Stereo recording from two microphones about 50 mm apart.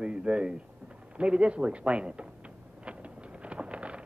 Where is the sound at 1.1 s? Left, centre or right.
Right.